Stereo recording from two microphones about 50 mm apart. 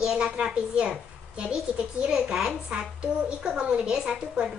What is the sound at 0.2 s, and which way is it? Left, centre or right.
A child's voice, centre.